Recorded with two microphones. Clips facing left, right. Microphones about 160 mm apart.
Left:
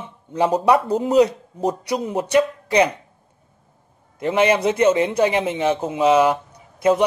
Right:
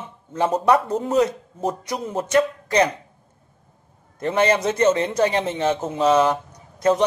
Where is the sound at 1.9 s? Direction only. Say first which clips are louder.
Left 2 dB; 15° left (ahead or behind).